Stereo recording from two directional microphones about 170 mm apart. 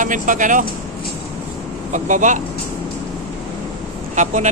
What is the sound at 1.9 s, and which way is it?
Speech, 50° right (ahead or behind).